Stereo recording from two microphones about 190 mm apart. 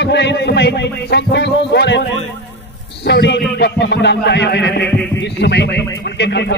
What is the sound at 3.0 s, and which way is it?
A man's voice, 65° left (ahead or behind).